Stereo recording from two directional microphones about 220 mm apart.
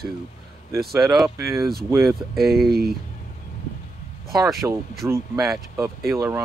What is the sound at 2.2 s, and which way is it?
Speech, centre (ahead or behind).